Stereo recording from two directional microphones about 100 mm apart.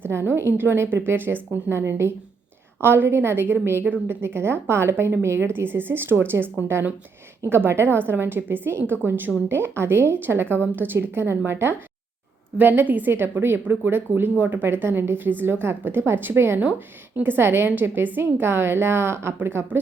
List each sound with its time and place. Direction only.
0.0 s a woman's voice: 20° right (ahead or behind)